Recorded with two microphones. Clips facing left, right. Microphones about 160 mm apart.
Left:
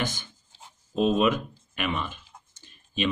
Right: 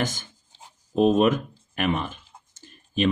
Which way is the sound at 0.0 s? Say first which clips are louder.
Right 3 dB; 45° right (ahead or behind).